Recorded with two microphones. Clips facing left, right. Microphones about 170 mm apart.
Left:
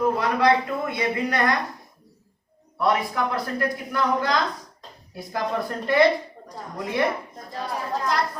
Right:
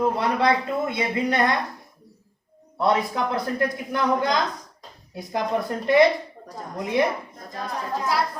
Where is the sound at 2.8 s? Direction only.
25° right (ahead or behind).